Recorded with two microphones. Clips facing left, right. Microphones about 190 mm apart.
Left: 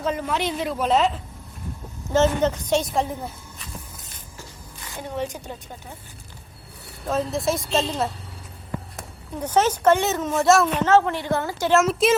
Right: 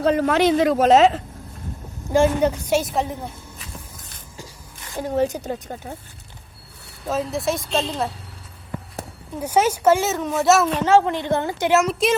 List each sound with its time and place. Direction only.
0.0 s speech: 70° right (ahead or behind); by 1.2 s 85° right
2.0 s a woman's voice: 10° right (ahead or behind)
4.9 s a woman's voice: 40° right (ahead or behind)
7.1 s a woman's voice: centre (ahead or behind)
9.4 s a woman's voice: 10° right (ahead or behind)
11.8 s a woman's voice: centre (ahead or behind)